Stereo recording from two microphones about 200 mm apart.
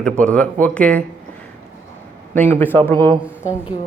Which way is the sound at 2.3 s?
10° left (ahead or behind).